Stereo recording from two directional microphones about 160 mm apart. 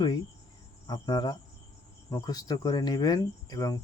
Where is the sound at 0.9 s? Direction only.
25° left (ahead or behind).